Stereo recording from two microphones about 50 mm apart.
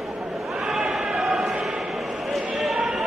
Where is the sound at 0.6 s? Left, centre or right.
Centre.